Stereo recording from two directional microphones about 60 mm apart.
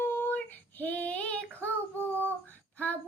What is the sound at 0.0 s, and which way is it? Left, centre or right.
Child singing, left.